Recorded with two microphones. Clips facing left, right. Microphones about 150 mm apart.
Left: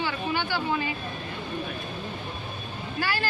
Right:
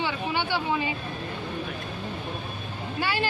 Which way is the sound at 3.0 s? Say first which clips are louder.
Right 2 dB; 25° right (ahead or behind).